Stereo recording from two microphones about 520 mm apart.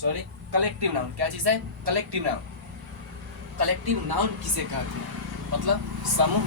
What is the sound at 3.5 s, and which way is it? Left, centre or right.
Speech, right.